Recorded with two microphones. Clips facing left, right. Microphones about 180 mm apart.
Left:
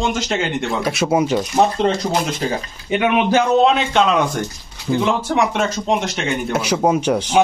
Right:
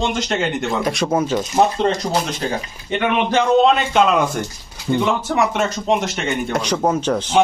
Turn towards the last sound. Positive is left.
turn(degrees=10)  # may be behind; listen again after turning